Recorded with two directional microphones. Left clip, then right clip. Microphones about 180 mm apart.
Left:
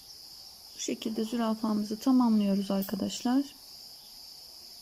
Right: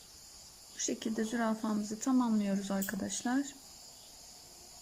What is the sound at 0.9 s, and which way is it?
Speech, 10° left (ahead or behind).